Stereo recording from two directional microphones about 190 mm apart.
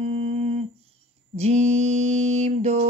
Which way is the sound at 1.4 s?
35° right (ahead or behind).